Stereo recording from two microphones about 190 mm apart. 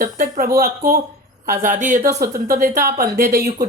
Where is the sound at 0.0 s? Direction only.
50° right (ahead or behind).